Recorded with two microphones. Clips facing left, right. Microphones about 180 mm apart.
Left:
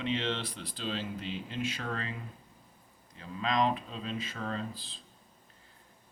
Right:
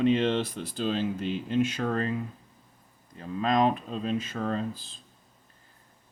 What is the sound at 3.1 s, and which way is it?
Speech, 45° right (ahead or behind).